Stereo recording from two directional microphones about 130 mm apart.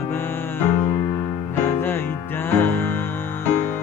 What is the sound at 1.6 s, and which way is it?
Music, 15° left (ahead or behind).